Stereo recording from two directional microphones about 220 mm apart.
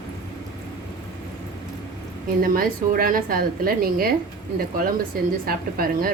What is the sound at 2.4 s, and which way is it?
A woman's voice, 40° right (ahead or behind).